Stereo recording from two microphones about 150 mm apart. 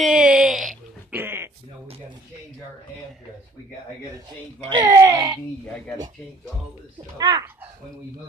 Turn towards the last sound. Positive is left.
turn(degrees=-25)  # may be behind; listen again after turning